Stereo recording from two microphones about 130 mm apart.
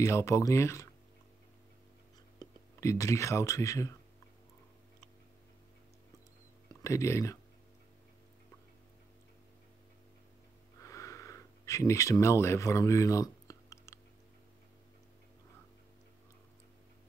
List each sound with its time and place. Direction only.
0.0 s speech: 25° left (ahead or behind)
2.3 s speech: 25° left (ahead or behind)
6.7 s speech: 25° left (ahead or behind)
10.8 s sniff: 25° left (ahead or behind)